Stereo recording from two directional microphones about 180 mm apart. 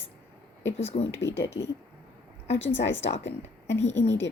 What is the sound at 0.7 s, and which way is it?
Speech, 35° left (ahead or behind).